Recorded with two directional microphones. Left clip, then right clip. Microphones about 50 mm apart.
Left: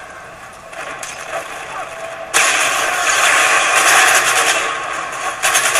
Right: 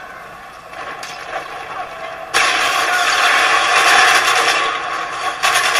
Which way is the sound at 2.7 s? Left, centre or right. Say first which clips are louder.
Right 1 dB; left.